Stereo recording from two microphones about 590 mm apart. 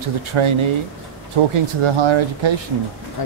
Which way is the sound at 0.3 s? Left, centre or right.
Right.